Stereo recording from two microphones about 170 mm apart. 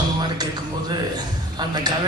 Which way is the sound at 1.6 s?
25° right (ahead or behind).